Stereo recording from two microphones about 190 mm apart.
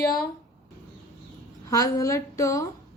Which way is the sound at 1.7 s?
15° left (ahead or behind).